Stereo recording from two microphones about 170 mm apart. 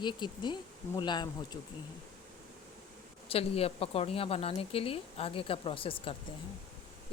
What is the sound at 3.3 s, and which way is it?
A woman's voice, 35° left (ahead or behind).